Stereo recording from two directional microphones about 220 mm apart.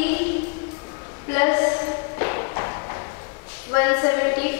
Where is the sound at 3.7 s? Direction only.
20° left (ahead or behind).